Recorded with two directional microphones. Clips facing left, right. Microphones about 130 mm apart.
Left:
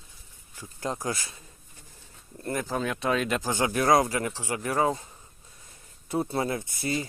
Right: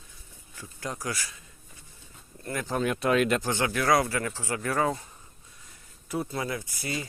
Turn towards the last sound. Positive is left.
turn(degrees=25)  # may be behind; listen again after turning